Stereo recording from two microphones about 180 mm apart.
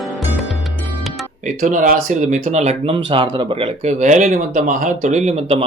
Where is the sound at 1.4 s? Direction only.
45° right (ahead or behind).